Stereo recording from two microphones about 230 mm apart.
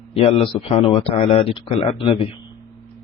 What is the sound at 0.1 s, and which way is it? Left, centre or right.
Speech, left.